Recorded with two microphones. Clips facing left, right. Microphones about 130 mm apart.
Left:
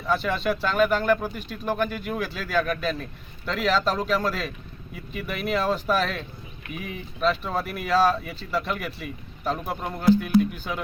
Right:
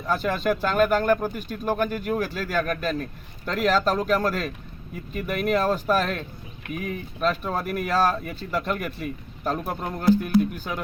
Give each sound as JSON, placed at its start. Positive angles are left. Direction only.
{"t": 0.1, "sound": "speech", "side_deg": -45}
{"t": 1.6, "sound": "speech", "side_deg": -15}
{"t": 2.1, "sound": "speech", "side_deg": -45}